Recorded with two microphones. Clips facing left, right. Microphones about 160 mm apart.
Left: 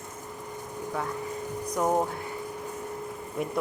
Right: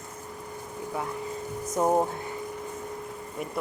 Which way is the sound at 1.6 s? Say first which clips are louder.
Right 2 dB; 20° right (ahead or behind).